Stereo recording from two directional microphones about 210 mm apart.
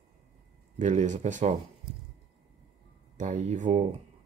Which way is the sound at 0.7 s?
35° right (ahead or behind).